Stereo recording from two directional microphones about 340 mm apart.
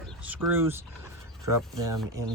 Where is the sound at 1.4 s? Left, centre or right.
Right.